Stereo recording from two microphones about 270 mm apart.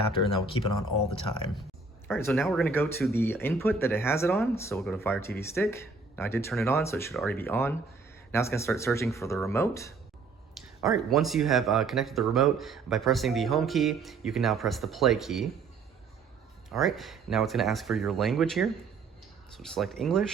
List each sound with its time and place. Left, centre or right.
0.1 s speech: centre
2.0 s speech: centre
10.5 s a sound: centre
11.1 s speech: centre
16.6 s speech: centre